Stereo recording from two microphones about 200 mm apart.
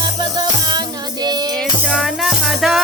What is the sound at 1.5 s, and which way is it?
Music, centre (ahead or behind).